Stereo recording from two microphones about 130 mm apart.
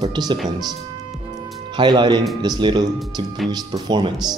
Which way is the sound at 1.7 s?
35° right (ahead or behind).